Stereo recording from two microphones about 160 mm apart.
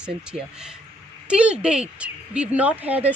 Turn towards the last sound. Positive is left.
turn(degrees=-10)  # may be behind; listen again after turning